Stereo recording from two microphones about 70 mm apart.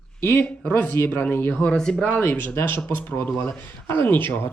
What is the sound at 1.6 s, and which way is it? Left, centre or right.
Speech, centre.